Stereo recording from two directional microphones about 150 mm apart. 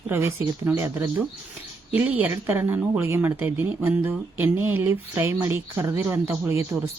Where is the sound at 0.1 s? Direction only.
20° right (ahead or behind).